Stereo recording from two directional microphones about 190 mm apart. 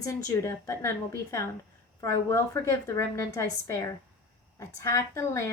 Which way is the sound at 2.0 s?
15° left (ahead or behind).